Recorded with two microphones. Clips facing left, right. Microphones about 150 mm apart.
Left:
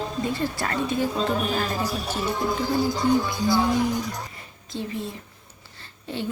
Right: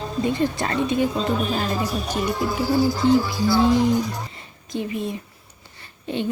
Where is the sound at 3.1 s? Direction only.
20° left (ahead or behind).